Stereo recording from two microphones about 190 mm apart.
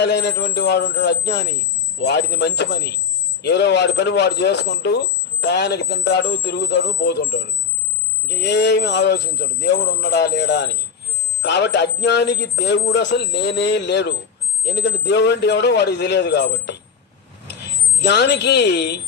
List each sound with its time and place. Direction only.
0.0 s speech: 60° left (ahead or behind)
18.0 s speech: 60° left (ahead or behind)